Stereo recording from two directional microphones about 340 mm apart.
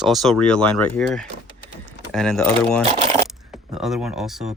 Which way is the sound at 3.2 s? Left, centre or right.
Centre.